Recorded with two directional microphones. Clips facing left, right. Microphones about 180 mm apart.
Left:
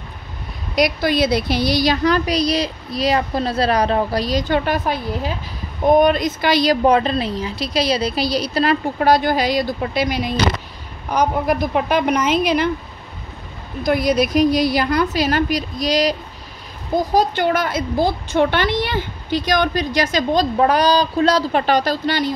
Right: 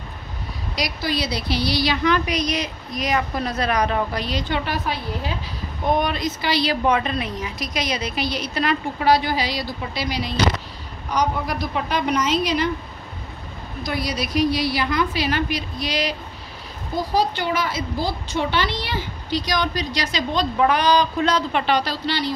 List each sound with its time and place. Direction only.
0.7 s a woman's voice: 55° left (ahead or behind)
13.8 s a woman's voice: 50° left (ahead or behind)